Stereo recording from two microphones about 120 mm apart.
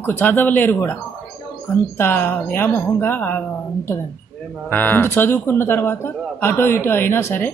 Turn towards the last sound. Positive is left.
turn(degrees=20)  # may be behind; listen again after turning